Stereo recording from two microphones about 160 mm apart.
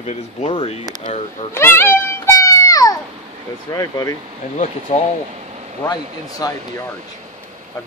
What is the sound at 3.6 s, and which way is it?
Speech, 20° left (ahead or behind).